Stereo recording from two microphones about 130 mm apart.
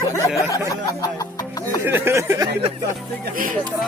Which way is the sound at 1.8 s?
15° right (ahead or behind).